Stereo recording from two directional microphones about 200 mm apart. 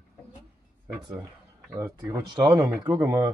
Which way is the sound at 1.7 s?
10° right (ahead or behind).